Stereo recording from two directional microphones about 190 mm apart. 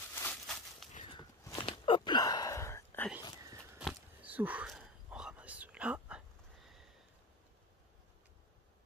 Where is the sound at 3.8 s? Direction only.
10° right (ahead or behind).